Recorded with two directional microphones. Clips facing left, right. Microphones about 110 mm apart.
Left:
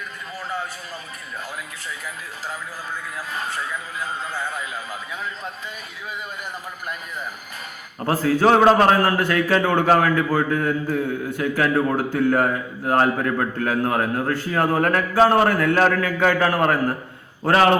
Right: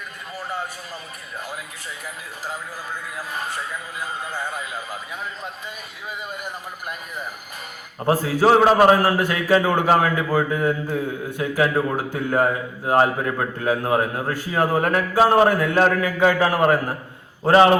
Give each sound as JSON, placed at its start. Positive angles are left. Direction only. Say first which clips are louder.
{"t": 7.9, "sound": "a man's voice", "louder": "even", "side_deg": -15}